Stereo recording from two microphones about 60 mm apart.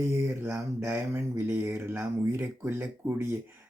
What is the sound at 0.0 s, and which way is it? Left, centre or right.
Mantra, right.